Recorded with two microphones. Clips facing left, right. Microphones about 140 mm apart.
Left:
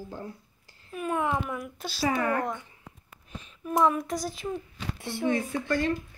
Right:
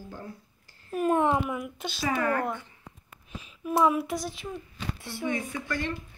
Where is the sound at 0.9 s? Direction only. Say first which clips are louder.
Right 5 dB; 35° right (ahead or behind).